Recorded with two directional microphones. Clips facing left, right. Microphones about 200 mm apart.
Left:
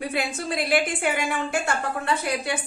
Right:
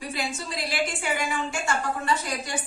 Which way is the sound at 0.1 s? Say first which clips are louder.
Left 4 dB; 55° left (ahead or behind).